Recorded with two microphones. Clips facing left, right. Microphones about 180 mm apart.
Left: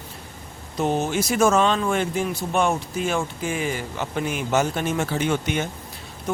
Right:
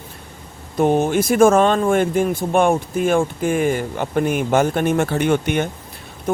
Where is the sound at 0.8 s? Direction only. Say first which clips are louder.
Right 6 dB; 55° right (ahead or behind).